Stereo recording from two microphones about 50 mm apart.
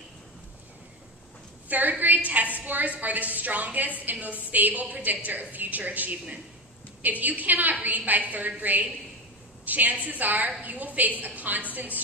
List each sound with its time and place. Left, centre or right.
1.7 s a woman's voice: right